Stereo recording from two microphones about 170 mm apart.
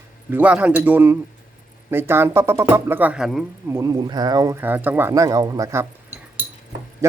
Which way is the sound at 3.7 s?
20° right (ahead or behind).